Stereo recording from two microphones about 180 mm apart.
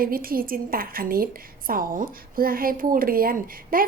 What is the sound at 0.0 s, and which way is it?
A woman's voice, 55° right (ahead or behind).